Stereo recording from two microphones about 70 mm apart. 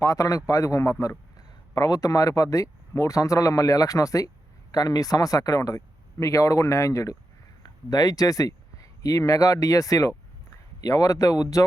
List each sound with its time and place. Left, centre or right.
0.0 s a man's voice: left
4.7 s a man's voice: left
7.6 s speech: left
10.8 s speech: left